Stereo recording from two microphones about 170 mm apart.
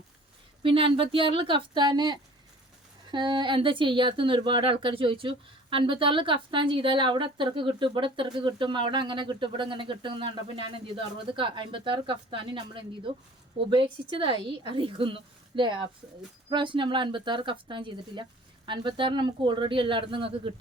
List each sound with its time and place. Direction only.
0.6 s speech: 30° right (ahead or behind)